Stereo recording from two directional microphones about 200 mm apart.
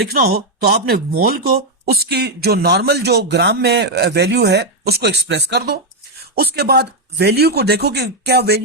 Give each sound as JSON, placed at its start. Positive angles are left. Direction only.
{"t": 0.0, "sound": "speech", "side_deg": -50}